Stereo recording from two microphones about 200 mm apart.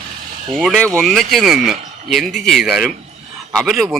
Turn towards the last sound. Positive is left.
turn(degrees=0)  # may be behind; listen again after turning